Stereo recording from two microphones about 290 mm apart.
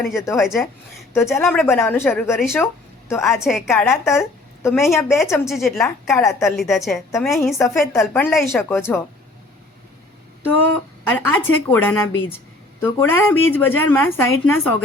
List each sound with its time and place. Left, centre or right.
0.0 s a woman's voice: centre
11.1 s speech: centre